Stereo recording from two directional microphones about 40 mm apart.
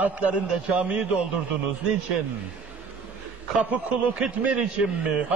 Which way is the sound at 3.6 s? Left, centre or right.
Right.